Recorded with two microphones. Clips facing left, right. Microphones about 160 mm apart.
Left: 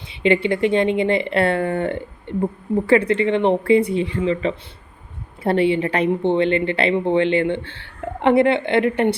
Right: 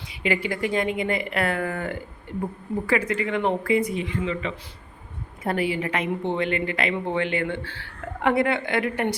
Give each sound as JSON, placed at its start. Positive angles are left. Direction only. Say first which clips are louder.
{"t": 0.1, "sound": "a woman's voice", "louder": "left 8 dB", "side_deg": 25}